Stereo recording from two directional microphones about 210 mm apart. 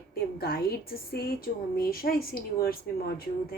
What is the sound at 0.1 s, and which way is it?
A woman's voice, 45° left (ahead or behind).